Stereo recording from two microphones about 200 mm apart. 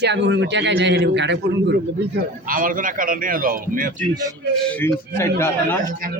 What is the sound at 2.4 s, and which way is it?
Speech, 45° right (ahead or behind).